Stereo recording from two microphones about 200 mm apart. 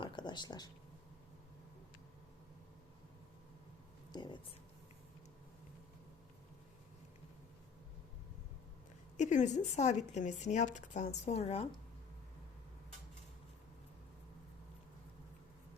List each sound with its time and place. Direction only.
0.0 s a sound: 25° left (ahead or behind)
4.1 s speech: 20° left (ahead or behind)
9.1 s speech: 35° left (ahead or behind)